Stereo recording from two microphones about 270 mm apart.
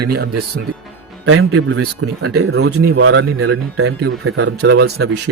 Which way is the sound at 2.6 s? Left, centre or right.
Right.